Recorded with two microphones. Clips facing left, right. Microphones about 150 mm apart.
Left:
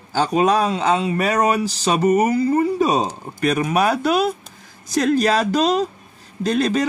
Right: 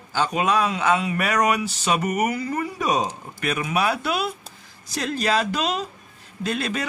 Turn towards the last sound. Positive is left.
turn(degrees=40)  # may be behind; listen again after turning